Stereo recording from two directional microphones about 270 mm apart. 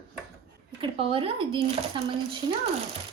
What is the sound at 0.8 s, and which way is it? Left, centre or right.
Speech, centre.